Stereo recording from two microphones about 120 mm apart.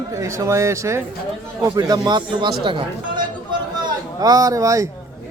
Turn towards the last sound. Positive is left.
turn(degrees=-25)  # may be behind; listen again after turning